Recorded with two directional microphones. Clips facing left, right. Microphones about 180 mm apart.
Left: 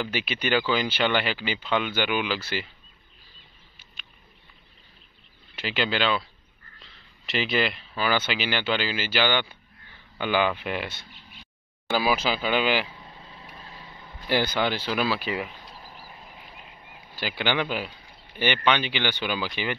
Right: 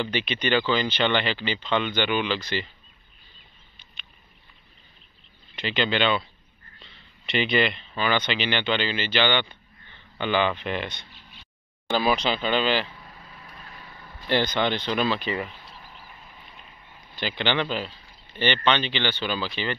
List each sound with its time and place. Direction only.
0.0 s speech: 5° left (ahead or behind)
5.6 s speech: 5° left (ahead or behind)
11.9 s vehicle: 5° left (ahead or behind)
14.1 s speech: 5° left (ahead or behind)
15.8 s a sound: 35° left (ahead or behind)
17.1 s speech: 10° left (ahead or behind)